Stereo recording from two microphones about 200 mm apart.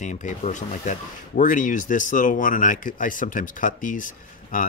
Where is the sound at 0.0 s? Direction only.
40° left (ahead or behind).